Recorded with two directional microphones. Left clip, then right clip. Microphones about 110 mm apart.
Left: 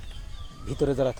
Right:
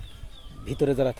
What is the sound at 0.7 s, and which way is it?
Speech, 40° right (ahead or behind).